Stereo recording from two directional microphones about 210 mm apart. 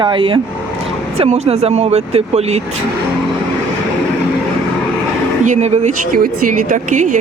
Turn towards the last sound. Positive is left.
turn(degrees=-35)  # may be behind; listen again after turning